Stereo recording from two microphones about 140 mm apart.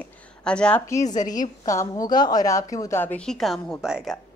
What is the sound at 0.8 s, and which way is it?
A woman's voice, 25° left (ahead or behind).